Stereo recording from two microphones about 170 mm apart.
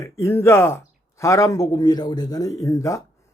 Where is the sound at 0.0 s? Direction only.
15° left (ahead or behind).